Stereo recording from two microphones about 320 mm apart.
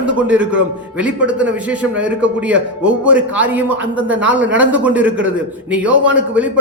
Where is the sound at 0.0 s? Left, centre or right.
Centre.